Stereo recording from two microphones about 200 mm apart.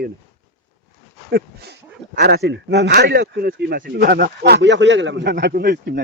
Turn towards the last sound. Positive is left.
turn(degrees=-50)  # may be behind; listen again after turning